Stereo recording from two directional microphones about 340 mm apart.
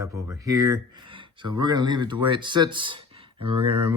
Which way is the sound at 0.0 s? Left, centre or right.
Centre.